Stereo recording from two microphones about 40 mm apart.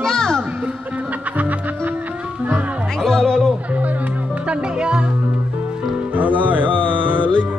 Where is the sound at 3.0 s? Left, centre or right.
Centre.